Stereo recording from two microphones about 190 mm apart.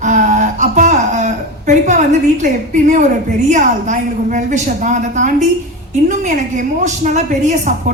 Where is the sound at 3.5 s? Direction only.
40° right (ahead or behind).